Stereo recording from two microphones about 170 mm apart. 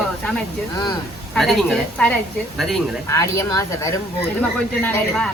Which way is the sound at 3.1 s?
15° left (ahead or behind).